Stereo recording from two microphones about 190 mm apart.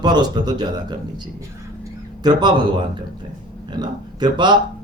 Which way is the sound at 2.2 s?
25° right (ahead or behind).